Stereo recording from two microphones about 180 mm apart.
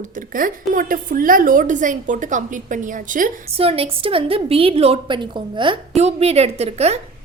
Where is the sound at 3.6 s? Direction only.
35° right (ahead or behind).